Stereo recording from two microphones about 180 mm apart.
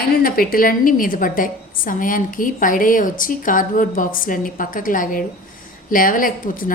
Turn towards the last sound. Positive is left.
turn(degrees=50)  # may be behind; listen again after turning